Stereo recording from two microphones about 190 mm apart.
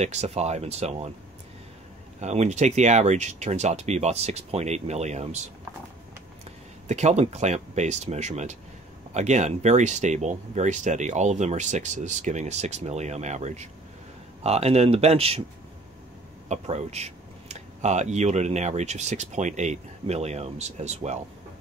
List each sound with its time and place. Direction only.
0.0 s speech: 35° right (ahead or behind)
2.1 s speech: 35° right (ahead or behind)
6.9 s speech: 35° right (ahead or behind)
16.4 s speech: 35° right (ahead or behind)